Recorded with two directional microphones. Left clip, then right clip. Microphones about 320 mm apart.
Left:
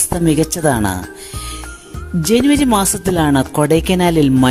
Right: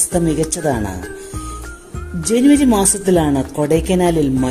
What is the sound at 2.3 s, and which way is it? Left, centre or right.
A woman's voice, left.